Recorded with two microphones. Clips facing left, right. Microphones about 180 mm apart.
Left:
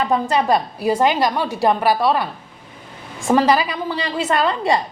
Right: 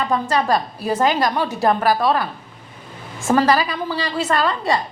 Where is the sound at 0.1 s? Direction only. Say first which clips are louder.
Even; 20° left (ahead or behind).